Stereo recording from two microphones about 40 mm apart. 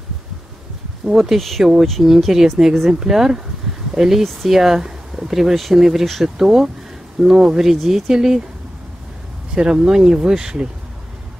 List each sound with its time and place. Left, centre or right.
1.0 s speech: centre
4.2 s speech: centre
4.5 s speech: centre
9.6 s speech: centre